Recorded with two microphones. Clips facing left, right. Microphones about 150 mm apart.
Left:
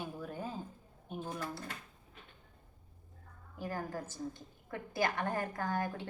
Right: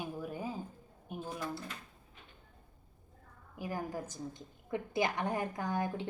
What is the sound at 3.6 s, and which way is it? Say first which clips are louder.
A woman's voice: right 1 dB; 15° right (ahead or behind).